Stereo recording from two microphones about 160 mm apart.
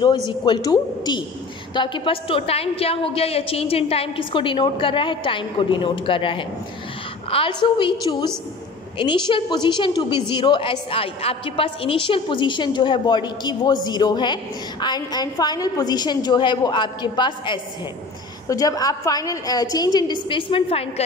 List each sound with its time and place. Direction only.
0.5 s a woman's voice: 25° left (ahead or behind)